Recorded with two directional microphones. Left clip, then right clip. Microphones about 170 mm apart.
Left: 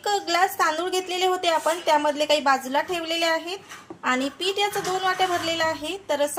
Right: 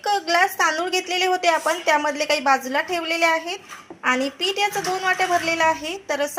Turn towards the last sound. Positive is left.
turn(degrees=-10)  # may be behind; listen again after turning